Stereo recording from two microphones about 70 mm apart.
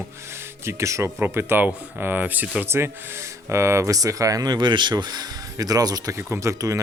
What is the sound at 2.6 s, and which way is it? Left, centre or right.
Speech, right.